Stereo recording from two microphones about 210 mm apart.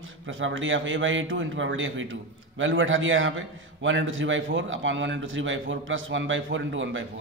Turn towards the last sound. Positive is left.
turn(degrees=-65)  # may be behind; listen again after turning